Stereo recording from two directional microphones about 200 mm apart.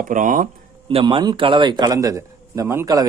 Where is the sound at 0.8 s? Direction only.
25° right (ahead or behind).